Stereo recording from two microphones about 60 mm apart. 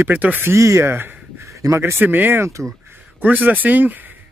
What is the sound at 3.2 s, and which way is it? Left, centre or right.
Speech, right.